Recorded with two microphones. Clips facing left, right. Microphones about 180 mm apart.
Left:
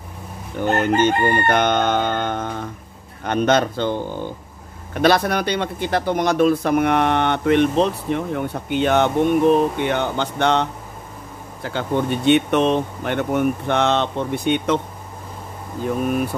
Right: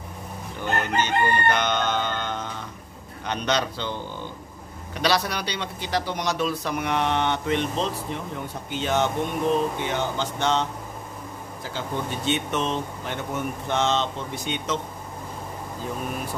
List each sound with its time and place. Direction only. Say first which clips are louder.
0.6 s crowing: left 8 dB; 50° left (ahead or behind)
4.9 s speech: left 7 dB; 55° left (ahead or behind)